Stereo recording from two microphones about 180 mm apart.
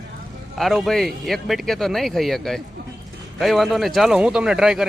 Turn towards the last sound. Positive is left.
turn(degrees=0)  # may be behind; listen again after turning